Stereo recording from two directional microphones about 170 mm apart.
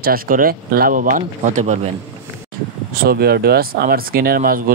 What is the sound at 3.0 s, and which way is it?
Speech, 65° right (ahead or behind).